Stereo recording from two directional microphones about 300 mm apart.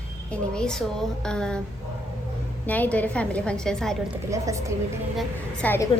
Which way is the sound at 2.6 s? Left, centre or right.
Centre.